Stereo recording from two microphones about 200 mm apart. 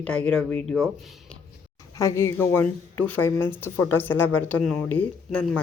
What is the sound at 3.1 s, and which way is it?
Speech, 90° left.